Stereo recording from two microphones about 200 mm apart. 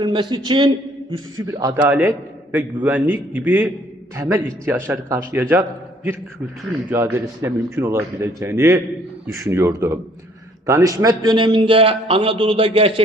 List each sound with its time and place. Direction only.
0.0 s a man's voice: 25° right (ahead or behind)
1.9 s a man's voice: 10° right (ahead or behind)
6.9 s a man's voice: 10° right (ahead or behind); by 12.9 s 30° right (ahead or behind)